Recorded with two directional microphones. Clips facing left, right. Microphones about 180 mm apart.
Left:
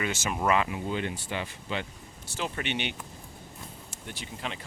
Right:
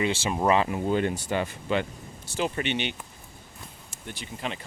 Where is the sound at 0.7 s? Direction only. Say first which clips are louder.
Right 6 dB; 45° right (ahead or behind).